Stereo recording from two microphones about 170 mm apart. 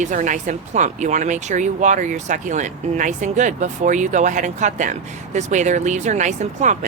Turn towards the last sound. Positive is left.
turn(degrees=-45)  # may be behind; listen again after turning